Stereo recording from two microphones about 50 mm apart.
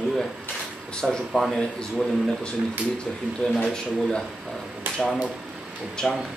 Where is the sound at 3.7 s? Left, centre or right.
Centre.